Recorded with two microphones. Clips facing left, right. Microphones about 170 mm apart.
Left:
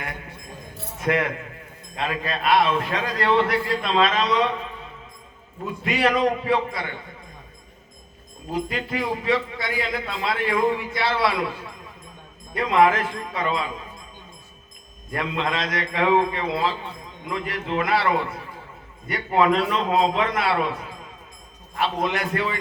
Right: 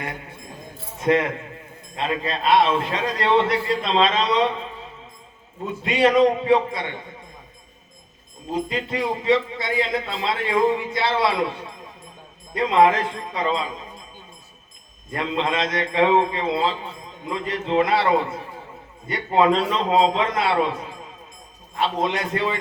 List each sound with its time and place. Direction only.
0.9 s a man's voice: 25° right (ahead or behind)
5.6 s a man's voice: 25° right (ahead or behind)
8.5 s a man's voice: 25° right (ahead or behind)
15.1 s a man's voice: 25° right (ahead or behind)